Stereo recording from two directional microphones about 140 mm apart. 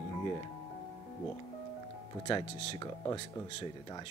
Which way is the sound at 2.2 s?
35° left (ahead or behind).